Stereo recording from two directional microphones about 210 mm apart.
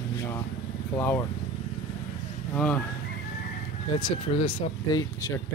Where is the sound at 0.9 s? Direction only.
10° left (ahead or behind).